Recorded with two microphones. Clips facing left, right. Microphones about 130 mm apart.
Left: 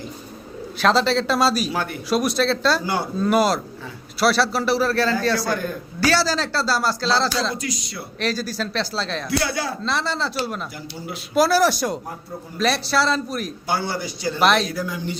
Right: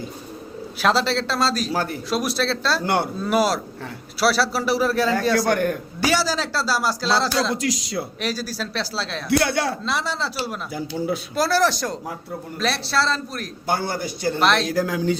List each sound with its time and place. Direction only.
0.8 s a man's voice: 5° right (ahead or behind)
1.7 s speech: 40° right (ahead or behind)
2.0 s a man's voice: centre (ahead or behind)
2.8 s speech: 65° right (ahead or behind)
3.2 s a man's voice: centre (ahead or behind)
5.5 s speech: 70° right (ahead or behind)
6.0 s speech: 15° right (ahead or behind)
7.5 s speech: 90° right
8.2 s speech: 10° right (ahead or behind)
9.3 s speech: 60° right (ahead or behind)
9.8 s a man's voice: 10° right (ahead or behind)
13.7 s a man's voice: 50° right (ahead or behind)
14.3 s a man's voice: centre (ahead or behind)
14.7 s speech: 90° right